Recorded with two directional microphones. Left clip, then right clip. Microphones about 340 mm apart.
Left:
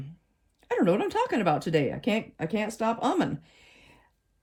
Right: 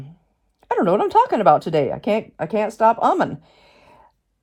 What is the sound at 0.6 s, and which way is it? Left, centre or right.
Speech, centre.